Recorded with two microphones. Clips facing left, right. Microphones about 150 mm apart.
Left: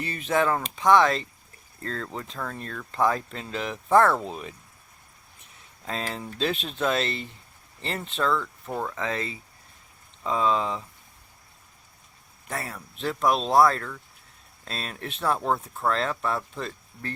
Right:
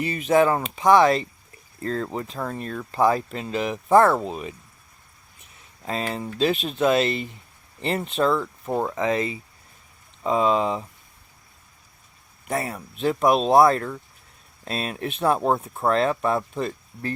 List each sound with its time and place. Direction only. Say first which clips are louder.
0.0 s speech: right 6 dB; 10° right (ahead or behind)
5.9 s speech: right 4 dB; 5° right (ahead or behind); by 9.0 s 25° right (ahead or behind)
9.0 s speech: right 7 dB; 15° right (ahead or behind)
12.5 s speech: right 7 dB; 20° right (ahead or behind)